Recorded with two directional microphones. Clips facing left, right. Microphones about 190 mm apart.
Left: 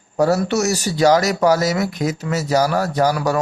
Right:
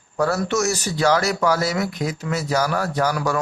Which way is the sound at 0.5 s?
40° left (ahead or behind).